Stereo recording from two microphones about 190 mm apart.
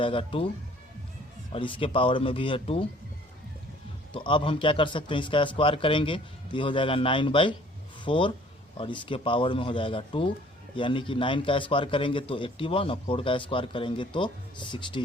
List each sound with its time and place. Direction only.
0.0 s a man's voice: 25° left (ahead or behind)
1.5 s a man's voice: 25° left (ahead or behind)
4.1 s a man's voice: 25° left (ahead or behind)